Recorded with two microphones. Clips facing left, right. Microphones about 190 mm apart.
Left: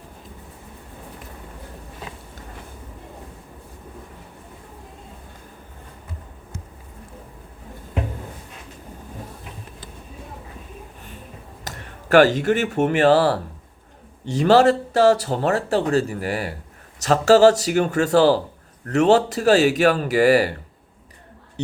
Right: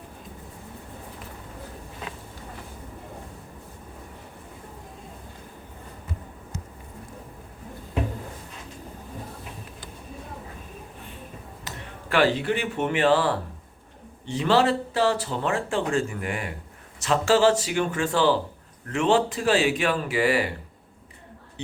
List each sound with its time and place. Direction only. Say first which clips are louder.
11.6 s speech: left 3 dB; 45° left (ahead or behind)